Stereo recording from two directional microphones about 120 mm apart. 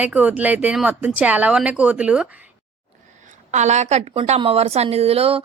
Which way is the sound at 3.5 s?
75° right (ahead or behind).